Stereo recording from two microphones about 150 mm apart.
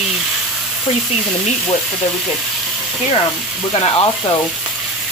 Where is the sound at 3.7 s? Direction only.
40° left (ahead or behind).